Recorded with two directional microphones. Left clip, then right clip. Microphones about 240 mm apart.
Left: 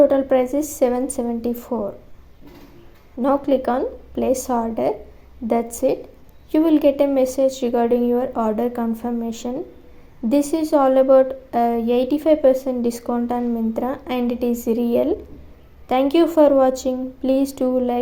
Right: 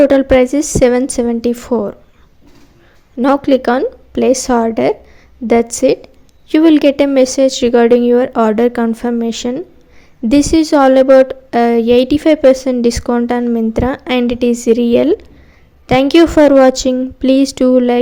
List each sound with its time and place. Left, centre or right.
0.1 s a woman's voice: right
3.2 s a woman's voice: right